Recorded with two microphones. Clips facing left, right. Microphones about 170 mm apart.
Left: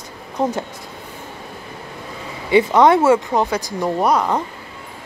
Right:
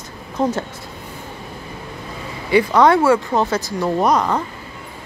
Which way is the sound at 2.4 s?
20° left (ahead or behind).